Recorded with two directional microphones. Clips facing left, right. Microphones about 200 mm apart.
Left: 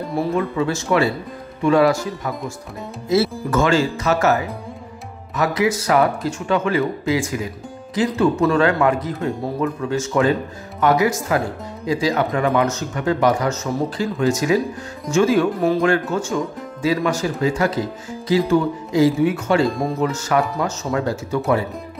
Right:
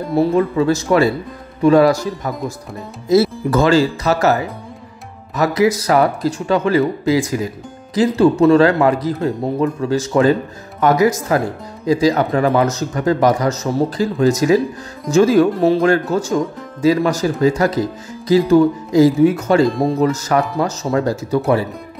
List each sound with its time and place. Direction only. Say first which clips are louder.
0.6 s speech: right 3 dB; 40° right (ahead or behind)
3.1 s speech: right 5 dB; 35° right (ahead or behind)